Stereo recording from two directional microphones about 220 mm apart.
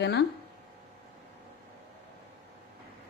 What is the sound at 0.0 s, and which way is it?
Speech, 50° left (ahead or behind).